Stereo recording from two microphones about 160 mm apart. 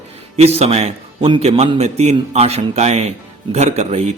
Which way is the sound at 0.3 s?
40° right (ahead or behind).